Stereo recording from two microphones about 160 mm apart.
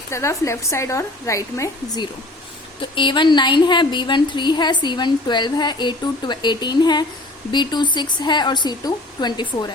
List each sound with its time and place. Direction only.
0.1 s speech: 20° left (ahead or behind)
2.8 s a woman's voice: 30° left (ahead or behind)